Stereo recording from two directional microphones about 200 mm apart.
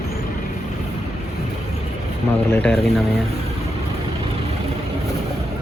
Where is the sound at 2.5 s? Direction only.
5° left (ahead or behind).